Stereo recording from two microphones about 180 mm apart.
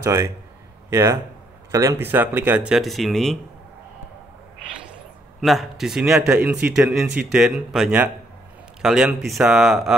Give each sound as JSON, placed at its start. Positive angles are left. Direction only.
{"t": 0.0, "sound": "speech", "side_deg": -15}
{"t": 5.4, "sound": "speech", "side_deg": 0}